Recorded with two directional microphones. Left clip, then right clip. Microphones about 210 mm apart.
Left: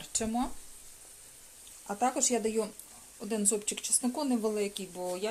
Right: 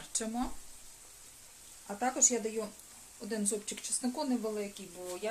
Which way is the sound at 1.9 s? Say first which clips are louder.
Left 2 dB; 30° left (ahead or behind).